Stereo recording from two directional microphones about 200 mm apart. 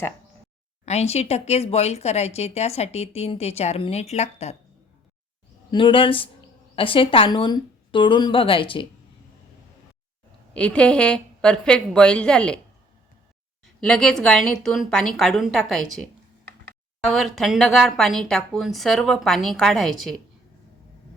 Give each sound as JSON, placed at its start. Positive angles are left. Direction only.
{"t": 0.9, "sound": "speech", "side_deg": 30}
{"t": 5.7, "sound": "a woman's voice", "side_deg": 25}
{"t": 10.5, "sound": "a woman's voice", "side_deg": 5}
{"t": 13.8, "sound": "a woman's voice", "side_deg": 5}
{"t": 17.1, "sound": "a woman's voice", "side_deg": 0}